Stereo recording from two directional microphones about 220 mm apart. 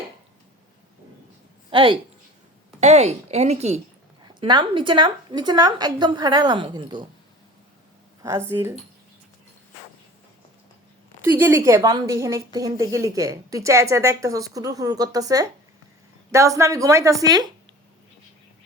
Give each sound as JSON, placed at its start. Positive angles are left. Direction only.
{"t": 1.7, "sound": "a woman's voice", "side_deg": -25}
{"t": 8.4, "sound": "speech", "side_deg": -10}
{"t": 11.2, "sound": "speech", "side_deg": -10}